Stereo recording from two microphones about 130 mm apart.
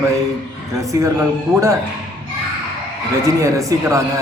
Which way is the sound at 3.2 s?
25° right (ahead or behind).